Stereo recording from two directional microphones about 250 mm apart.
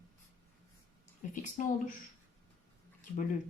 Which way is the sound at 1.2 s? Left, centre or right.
Left.